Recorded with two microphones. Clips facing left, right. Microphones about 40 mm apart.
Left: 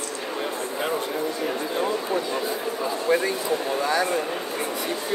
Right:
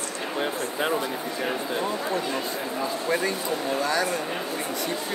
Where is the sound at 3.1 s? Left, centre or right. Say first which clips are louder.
Left 5 dB; centre.